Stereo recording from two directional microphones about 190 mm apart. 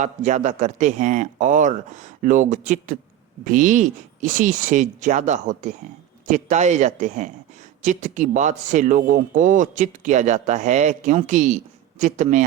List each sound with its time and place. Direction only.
0.0 s speech: 40° right (ahead or behind)